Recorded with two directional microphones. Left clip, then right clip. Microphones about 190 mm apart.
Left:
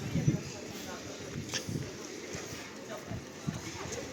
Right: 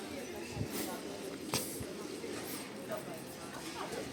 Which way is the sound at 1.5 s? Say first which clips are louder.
Even; 30° right (ahead or behind).